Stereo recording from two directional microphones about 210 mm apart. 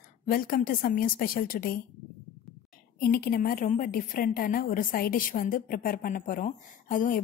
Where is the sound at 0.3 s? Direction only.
40° left (ahead or behind).